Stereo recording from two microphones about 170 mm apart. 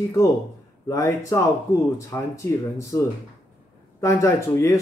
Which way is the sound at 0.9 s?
20° left (ahead or behind).